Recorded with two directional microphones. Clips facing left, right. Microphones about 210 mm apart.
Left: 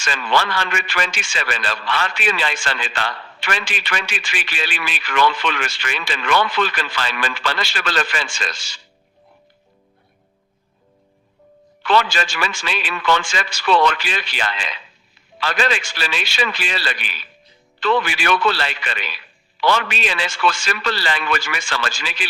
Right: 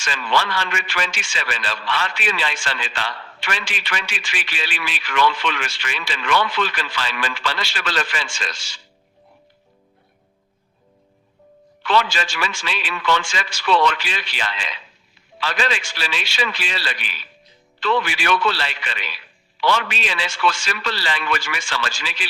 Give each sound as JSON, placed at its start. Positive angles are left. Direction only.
{"t": 0.0, "sound": "a man's voice", "side_deg": 50}
{"t": 11.8, "sound": "a man's voice", "side_deg": 50}